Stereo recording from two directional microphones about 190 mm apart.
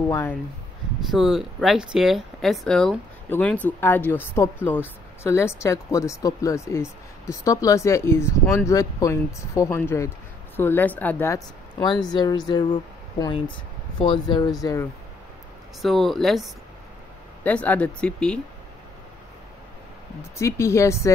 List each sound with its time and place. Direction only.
0.1 s speech: 10° left (ahead or behind)
1.1 s speech: centre (ahead or behind); by 14.9 s 20° left (ahead or behind)
15.8 s speech: centre (ahead or behind)
20.2 s speech: 15° left (ahead or behind)